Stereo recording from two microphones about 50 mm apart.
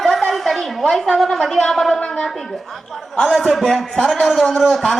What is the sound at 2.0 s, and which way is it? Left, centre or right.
Speech, left.